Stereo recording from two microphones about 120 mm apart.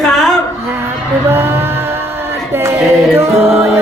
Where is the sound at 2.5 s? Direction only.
25° right (ahead or behind).